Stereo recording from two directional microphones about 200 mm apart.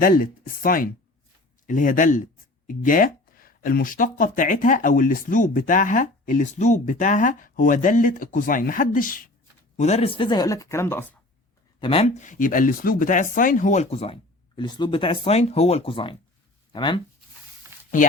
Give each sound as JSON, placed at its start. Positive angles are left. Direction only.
{"t": 0.0, "sound": "speech", "side_deg": 45}
{"t": 11.8, "sound": "speech", "side_deg": 25}
{"t": 17.7, "sound": "a sound", "side_deg": -10}